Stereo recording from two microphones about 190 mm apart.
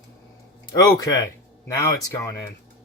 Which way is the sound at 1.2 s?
15° left (ahead or behind).